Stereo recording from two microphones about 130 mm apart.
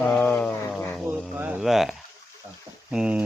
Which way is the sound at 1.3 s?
10° right (ahead or behind).